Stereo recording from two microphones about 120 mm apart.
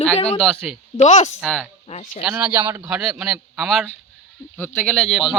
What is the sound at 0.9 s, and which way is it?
Speech, 75° left (ahead or behind).